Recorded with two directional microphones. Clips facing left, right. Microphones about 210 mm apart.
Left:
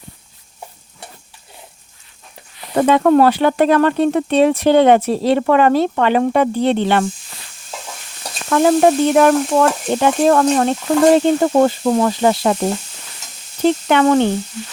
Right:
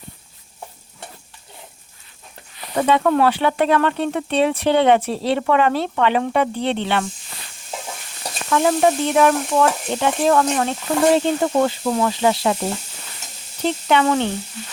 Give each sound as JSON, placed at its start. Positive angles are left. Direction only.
{"t": 2.7, "sound": "speech", "side_deg": 45}
{"t": 8.4, "sound": "speech", "side_deg": 50}
{"t": 13.7, "sound": "speech", "side_deg": 50}